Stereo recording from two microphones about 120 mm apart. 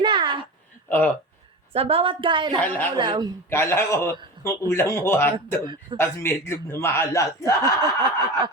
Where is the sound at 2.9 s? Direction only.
40° right (ahead or behind).